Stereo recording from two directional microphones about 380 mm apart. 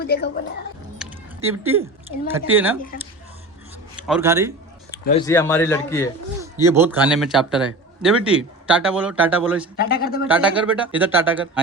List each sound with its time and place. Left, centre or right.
0.0 s a woman's voice: left
1.0 s a sound: centre
1.5 s a man's voice: centre
4.0 s a man's voice: centre
5.0 s speech: centre
6.4 s a man's voice: centre
9.7 s speech: left
10.2 s a man's voice: centre